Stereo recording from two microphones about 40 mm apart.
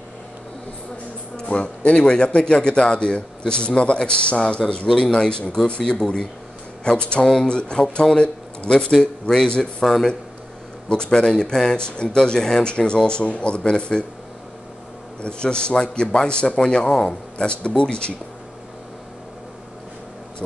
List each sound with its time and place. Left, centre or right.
1.3 s speech: left
10.9 s speech: centre
15.2 s speech: left